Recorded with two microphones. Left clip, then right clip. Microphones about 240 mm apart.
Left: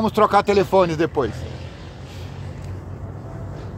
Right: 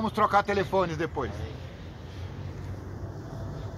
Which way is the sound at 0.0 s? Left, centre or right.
Left.